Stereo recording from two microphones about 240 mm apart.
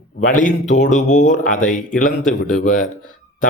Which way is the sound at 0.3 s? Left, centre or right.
Left.